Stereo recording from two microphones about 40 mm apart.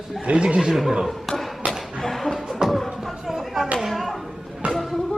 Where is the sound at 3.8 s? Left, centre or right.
Centre.